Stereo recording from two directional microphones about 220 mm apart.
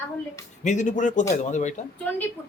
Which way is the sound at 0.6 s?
35° left (ahead or behind).